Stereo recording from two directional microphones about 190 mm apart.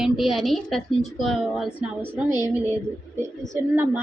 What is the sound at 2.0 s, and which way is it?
Speech, 20° left (ahead or behind).